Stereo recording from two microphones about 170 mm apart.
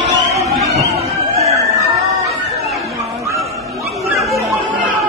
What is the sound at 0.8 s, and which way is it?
Chatter, 40° right (ahead or behind).